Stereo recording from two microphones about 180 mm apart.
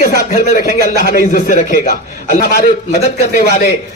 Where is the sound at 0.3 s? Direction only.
40° left (ahead or behind).